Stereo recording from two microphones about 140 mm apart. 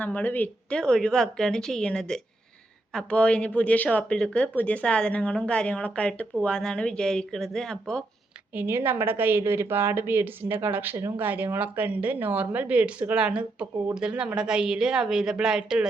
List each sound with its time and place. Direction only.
0.0 s speech: 10° left (ahead or behind)
8.5 s a woman's voice: 15° right (ahead or behind)